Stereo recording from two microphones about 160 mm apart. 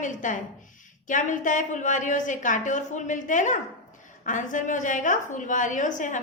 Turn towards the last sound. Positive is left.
turn(degrees=50)  # may be behind; listen again after turning